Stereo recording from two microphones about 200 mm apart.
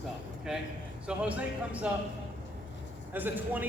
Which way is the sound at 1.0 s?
5° right (ahead or behind).